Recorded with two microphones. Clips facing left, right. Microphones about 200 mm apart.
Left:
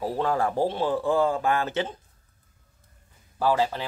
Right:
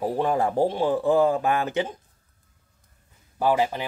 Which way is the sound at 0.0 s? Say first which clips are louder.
Right 2 dB; 15° right (ahead or behind).